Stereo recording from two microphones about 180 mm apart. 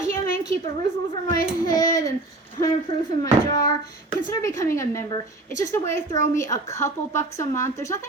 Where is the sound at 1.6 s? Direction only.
20° left (ahead or behind).